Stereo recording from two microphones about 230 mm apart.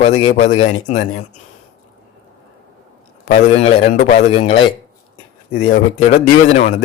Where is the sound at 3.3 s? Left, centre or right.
Left.